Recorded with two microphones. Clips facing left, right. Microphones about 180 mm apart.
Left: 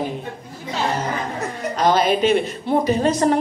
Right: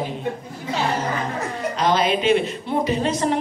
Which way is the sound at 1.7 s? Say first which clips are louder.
Left 3 dB; 45° left (ahead or behind).